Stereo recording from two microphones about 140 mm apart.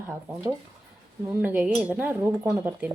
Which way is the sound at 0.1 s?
15° right (ahead or behind).